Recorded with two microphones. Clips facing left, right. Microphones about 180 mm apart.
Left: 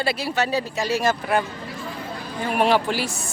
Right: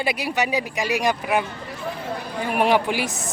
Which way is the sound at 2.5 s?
15° right (ahead or behind).